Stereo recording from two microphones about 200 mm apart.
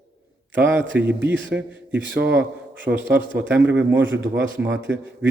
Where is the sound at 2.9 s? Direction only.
30° right (ahead or behind).